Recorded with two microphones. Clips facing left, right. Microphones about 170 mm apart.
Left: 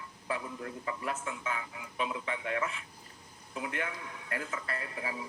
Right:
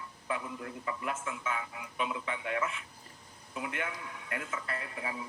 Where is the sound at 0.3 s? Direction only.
30° left (ahead or behind).